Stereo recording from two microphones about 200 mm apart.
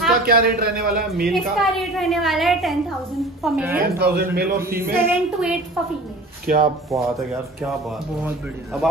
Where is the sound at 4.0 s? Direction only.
55° right (ahead or behind).